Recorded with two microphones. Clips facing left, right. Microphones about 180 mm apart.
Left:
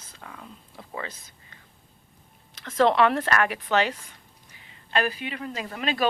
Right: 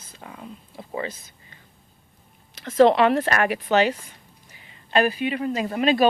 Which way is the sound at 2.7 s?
20° right (ahead or behind).